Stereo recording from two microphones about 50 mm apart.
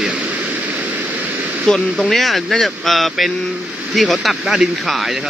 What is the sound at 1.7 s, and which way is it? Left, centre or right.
Speech, centre.